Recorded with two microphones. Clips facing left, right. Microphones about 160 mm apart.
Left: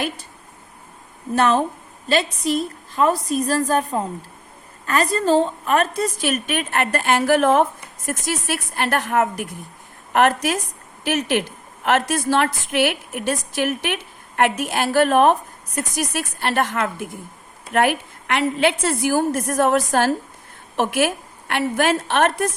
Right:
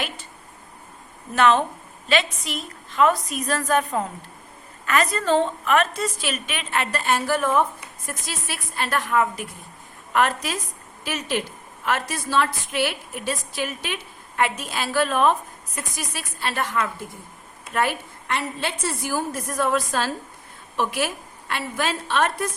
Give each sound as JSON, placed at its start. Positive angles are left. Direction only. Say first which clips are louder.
{"t": 2.0, "sound": "a woman's voice", "louder": "left 4 dB", "side_deg": 35}